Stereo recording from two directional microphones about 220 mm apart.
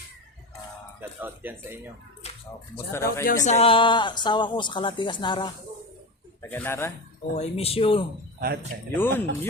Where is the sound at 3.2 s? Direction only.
35° left (ahead or behind).